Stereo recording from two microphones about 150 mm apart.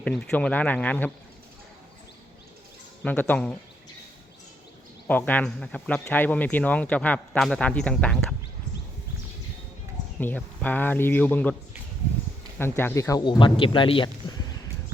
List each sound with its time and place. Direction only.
0.0 s speech: 5° left (ahead or behind)
3.0 s speech: 10° left (ahead or behind)
5.0 s speech: 10° left (ahead or behind)
10.2 s speech: 10° left (ahead or behind)
12.5 s speech: 15° left (ahead or behind)
13.2 s speech: 35° left (ahead or behind)